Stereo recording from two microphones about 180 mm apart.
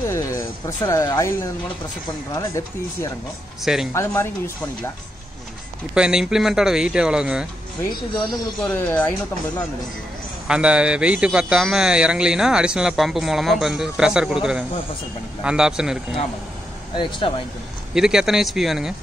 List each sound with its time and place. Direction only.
0.1 s speech: 15° left (ahead or behind)
3.6 s speech: centre (ahead or behind)
3.9 s speech: 15° left (ahead or behind)
5.9 s speech: 5° right (ahead or behind)
8.7 s speech: 10° left (ahead or behind)
10.5 s speech: 5° right (ahead or behind)
16.9 s speech: 25° left (ahead or behind)
17.9 s speech: 5° right (ahead or behind)